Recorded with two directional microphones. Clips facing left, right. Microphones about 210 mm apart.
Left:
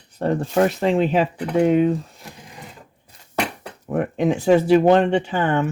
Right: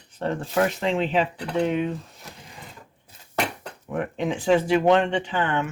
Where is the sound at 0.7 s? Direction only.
40° left (ahead or behind).